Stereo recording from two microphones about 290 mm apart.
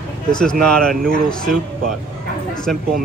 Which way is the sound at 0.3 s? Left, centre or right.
Centre.